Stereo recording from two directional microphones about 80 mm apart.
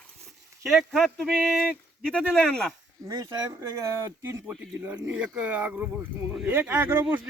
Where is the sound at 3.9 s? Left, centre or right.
Right.